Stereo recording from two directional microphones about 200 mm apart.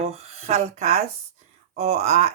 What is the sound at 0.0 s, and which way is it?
Speech, 35° right (ahead or behind).